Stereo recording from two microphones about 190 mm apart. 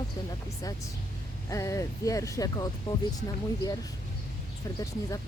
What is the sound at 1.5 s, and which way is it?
Speech, 15° left (ahead or behind).